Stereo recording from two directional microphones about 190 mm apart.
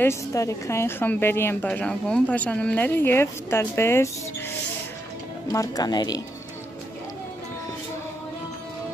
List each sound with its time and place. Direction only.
0.0 s a woman's voice: 15° left (ahead or behind)
5.5 s speech: 20° left (ahead or behind)